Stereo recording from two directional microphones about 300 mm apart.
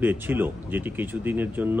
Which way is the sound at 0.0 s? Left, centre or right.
Centre.